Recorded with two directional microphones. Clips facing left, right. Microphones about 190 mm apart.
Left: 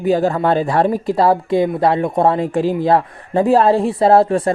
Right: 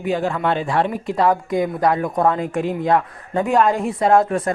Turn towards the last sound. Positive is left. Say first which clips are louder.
# left 4 dB
turn(degrees=30)  # may be behind; listen again after turning